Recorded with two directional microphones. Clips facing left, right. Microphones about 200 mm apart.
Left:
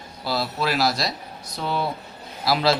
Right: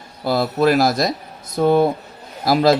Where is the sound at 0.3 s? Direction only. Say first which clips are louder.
Right 9 dB; 50° right (ahead or behind).